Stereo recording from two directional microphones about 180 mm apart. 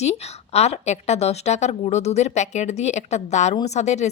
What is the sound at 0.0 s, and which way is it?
A woman's voice, 35° left (ahead or behind).